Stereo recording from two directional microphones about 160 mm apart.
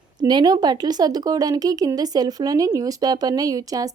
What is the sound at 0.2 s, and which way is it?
Speech, 25° right (ahead or behind).